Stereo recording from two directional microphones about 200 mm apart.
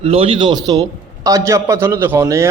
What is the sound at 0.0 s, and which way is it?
A man's voice, 30° right (ahead or behind).